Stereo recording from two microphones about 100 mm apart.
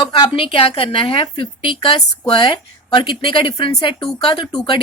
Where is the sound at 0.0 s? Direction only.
60° left (ahead or behind).